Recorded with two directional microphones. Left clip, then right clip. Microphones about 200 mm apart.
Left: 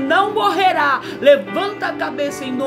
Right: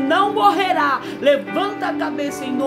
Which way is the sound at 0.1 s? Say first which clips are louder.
Even; 5° left (ahead or behind).